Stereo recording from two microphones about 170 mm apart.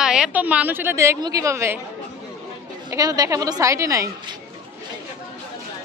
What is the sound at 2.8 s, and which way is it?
A woman's voice, 20° right (ahead or behind).